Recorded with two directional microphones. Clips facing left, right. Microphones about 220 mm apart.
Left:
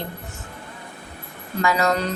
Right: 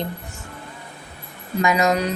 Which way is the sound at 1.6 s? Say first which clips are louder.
Right 2 dB; 15° right (ahead or behind).